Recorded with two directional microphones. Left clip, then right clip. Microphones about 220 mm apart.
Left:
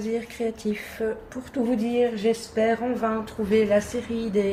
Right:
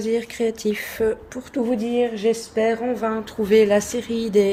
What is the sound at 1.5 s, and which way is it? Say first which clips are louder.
Speech: right 3 dB; 35° right (ahead or behind).